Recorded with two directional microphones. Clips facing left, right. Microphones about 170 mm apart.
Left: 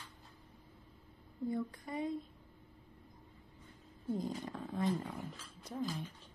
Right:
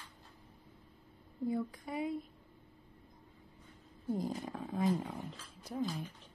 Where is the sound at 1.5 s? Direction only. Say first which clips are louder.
Right 2 dB; 5° right (ahead or behind).